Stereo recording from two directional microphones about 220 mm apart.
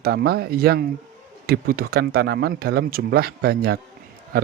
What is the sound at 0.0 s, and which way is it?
Speech, 45° right (ahead or behind).